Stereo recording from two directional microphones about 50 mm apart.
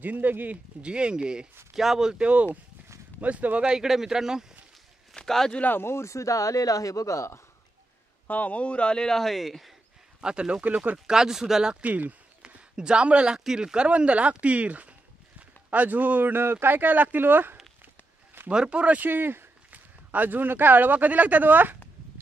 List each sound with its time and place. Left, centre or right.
0.0 s speech: right
0.8 s speech: right
2.2 s speech: right
3.6 s speech: centre
5.1 s speech: centre
5.8 s speech: left
8.3 s speech: left; by 9.8 s centre
10.2 s speech: centre
11.8 s speech: right
18.5 s speech: centre
18.9 s a sound: right
20.1 s speech: right